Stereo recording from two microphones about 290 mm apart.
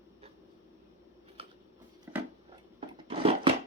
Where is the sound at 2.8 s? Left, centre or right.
Centre.